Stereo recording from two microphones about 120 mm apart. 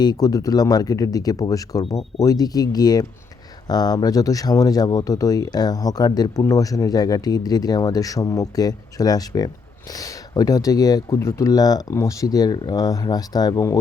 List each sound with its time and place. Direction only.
0.0 s speech: 35° left (ahead or behind)